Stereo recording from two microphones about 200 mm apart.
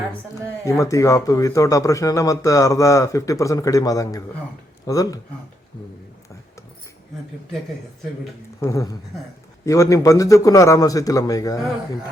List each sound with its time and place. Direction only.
0.6 s speech: 15° left (ahead or behind)
8.6 s speech: 15° left (ahead or behind)